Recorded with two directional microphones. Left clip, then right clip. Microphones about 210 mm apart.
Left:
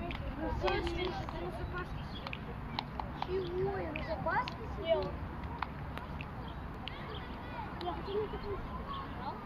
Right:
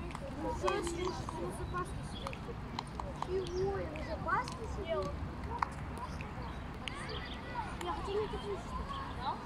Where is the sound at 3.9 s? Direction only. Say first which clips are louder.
Left 1 dB; 35° left (ahead or behind).